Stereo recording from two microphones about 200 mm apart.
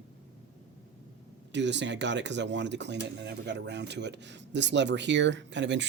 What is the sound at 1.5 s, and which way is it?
Speech, 60° right (ahead or behind).